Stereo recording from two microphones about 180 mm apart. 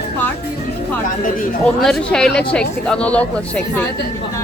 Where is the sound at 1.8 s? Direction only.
5° left (ahead or behind).